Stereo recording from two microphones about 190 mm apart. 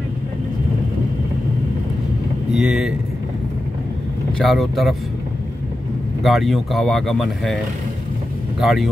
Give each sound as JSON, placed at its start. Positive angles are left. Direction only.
{"t": 2.5, "sound": "speech", "side_deg": -5}
{"t": 4.4, "sound": "speech", "side_deg": 0}
{"t": 6.2, "sound": "speech", "side_deg": 0}
{"t": 8.5, "sound": "speech", "side_deg": 0}